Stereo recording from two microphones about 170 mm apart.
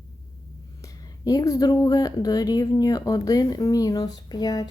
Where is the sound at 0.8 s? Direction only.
20° left (ahead or behind).